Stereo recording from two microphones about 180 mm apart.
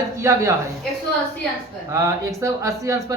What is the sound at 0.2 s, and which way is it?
Speech, 15° right (ahead or behind).